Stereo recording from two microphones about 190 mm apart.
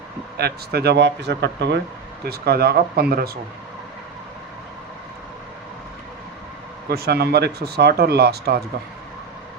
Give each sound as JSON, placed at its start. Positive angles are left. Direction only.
{"t": 0.3, "sound": "speech", "side_deg": -55}
{"t": 6.9, "sound": "speech", "side_deg": -55}